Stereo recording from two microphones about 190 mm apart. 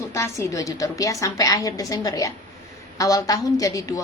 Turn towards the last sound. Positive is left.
turn(degrees=15)  # may be behind; listen again after turning